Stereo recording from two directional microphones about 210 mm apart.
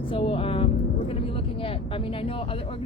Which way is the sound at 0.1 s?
25° left (ahead or behind).